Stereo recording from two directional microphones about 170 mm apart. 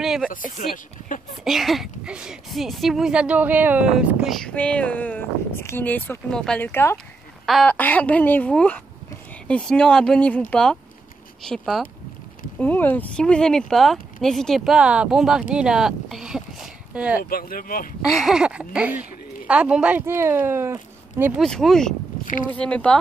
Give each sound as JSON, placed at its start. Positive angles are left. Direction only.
{"t": 0.0, "sound": "a sound", "side_deg": 0}
{"t": 0.3, "sound": "speech", "side_deg": 50}
{"t": 1.4, "sound": "speech", "side_deg": 0}
{"t": 17.2, "sound": "speech", "side_deg": 60}
{"t": 18.1, "sound": "speech", "side_deg": -5}
{"t": 21.4, "sound": "speech", "side_deg": 0}